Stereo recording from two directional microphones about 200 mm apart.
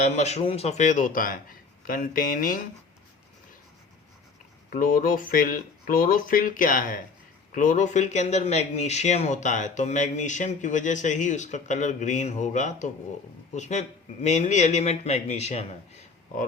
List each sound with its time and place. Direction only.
0.0 s speech: 35° left (ahead or behind)
4.7 s speech: 45° left (ahead or behind)